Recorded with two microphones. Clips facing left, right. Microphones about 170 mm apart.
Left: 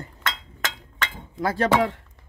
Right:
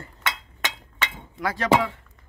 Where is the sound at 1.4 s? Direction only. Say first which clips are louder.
Left 4 dB; 30° left (ahead or behind).